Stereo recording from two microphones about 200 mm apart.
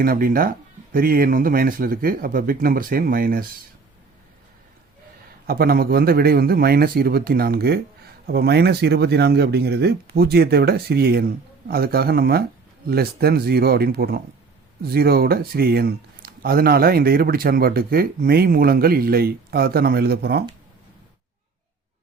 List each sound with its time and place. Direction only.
0.0 s speech: 45° right (ahead or behind)
5.5 s speech: 50° right (ahead or behind)